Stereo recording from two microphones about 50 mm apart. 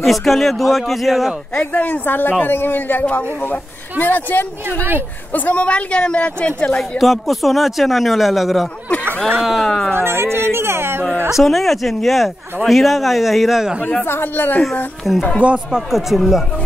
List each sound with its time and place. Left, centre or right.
0.0 s speech: centre
1.6 s a man's voice: left
7.0 s speech: centre
9.9 s a sound: right
11.2 s speech: centre
14.0 s speech: left
15.0 s speech: centre